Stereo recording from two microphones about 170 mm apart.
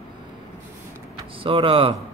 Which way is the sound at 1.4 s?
30° right (ahead or behind).